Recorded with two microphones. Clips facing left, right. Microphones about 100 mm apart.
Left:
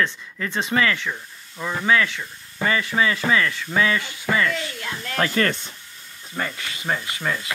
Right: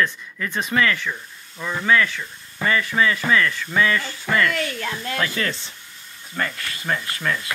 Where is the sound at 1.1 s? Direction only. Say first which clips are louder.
Even; 15° left (ahead or behind).